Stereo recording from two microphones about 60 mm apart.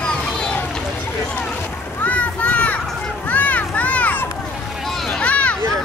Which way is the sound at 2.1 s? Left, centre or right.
Left.